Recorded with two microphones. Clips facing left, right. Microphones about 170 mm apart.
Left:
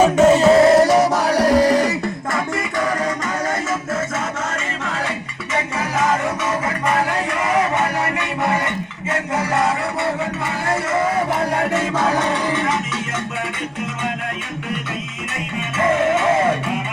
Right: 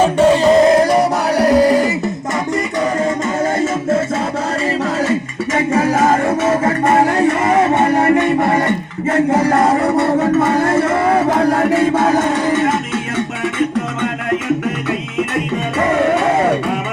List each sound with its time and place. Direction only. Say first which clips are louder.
0.0 s music: right 1 dB; 10° left (ahead or behind)
3.6 s music: right 7 dB; 30° right (ahead or behind)
5.7 s music: right 7 dB; 50° right (ahead or behind)